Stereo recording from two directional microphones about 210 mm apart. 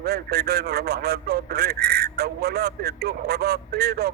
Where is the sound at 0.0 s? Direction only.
50° right (ahead or behind).